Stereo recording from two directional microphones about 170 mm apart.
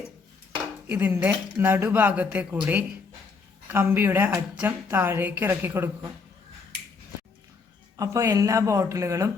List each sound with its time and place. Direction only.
0.9 s a woman's voice: 10° right (ahead or behind)
3.7 s a woman's voice: 10° right (ahead or behind)
7.9 s a woman's voice: 20° right (ahead or behind)